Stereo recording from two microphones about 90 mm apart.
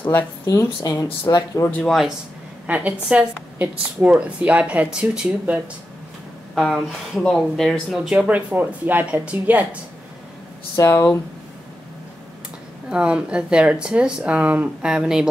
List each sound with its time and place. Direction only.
0.5 s speech: 40° left (ahead or behind)
1.9 s speech: centre (ahead or behind)
2.6 s a woman's voice: 15° right (ahead or behind)
6.5 s speech: 5° left (ahead or behind)
8.3 s a woman's voice: 15° right (ahead or behind)
10.8 s speech: 35° left (ahead or behind)
12.9 s a woman's voice: 10° right (ahead or behind)